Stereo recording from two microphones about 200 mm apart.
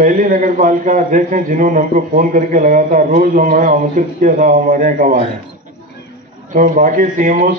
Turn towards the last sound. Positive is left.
turn(degrees=-40)  # may be behind; listen again after turning